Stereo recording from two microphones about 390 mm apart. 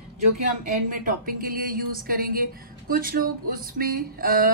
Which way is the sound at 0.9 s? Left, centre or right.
Right.